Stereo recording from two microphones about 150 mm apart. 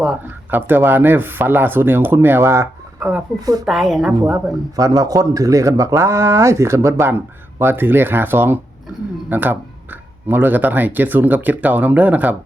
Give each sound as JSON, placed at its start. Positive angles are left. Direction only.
{"t": 0.0, "sound": "speech", "side_deg": -10}
{"t": 3.7, "sound": "a woman's voice", "side_deg": 0}
{"t": 4.8, "sound": "speech", "side_deg": -20}